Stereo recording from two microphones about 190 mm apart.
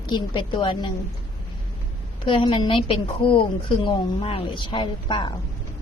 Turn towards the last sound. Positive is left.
turn(degrees=25)  # may be behind; listen again after turning